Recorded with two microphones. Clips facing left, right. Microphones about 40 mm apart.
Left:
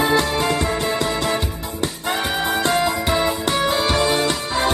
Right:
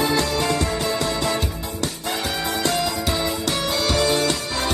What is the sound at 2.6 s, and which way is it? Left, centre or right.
Music, left.